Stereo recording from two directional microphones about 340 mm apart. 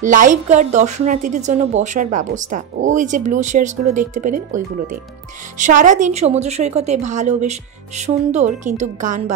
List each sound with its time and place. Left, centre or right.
0.0 s a woman's voice: right
5.6 s a woman's voice: right